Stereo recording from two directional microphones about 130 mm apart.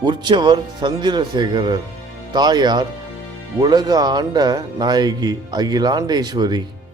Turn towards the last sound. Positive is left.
turn(degrees=-30)  # may be behind; listen again after turning